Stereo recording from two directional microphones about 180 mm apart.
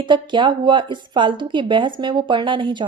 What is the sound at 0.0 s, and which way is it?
Speech, 25° right (ahead or behind).